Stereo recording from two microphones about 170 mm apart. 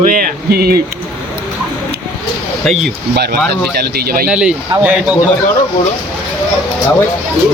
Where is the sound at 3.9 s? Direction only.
60° right (ahead or behind).